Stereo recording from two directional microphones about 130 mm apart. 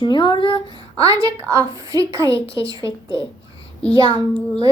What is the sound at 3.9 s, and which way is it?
Speech, 45° left (ahead or behind).